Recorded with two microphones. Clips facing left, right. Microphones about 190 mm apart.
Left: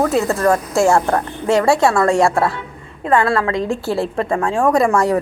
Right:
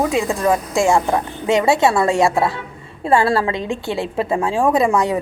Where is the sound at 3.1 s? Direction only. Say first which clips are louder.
Even; 30° right (ahead or behind).